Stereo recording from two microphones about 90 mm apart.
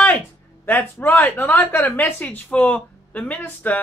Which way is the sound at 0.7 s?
20° left (ahead or behind).